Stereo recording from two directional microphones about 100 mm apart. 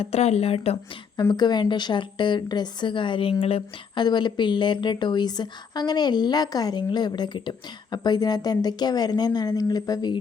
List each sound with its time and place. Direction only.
0.0 s speech: 90° left
1.3 s a woman's voice: 45° left (ahead or behind); by 3.6 s 70° left (ahead or behind)
3.9 s a woman's voice: 50° left (ahead or behind)